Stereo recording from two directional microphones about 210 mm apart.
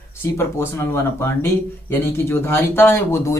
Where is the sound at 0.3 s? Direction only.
10° left (ahead or behind).